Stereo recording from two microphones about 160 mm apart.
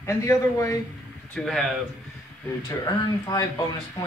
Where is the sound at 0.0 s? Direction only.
20° left (ahead or behind).